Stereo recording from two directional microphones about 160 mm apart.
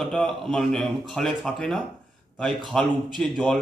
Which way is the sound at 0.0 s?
5° left (ahead or behind).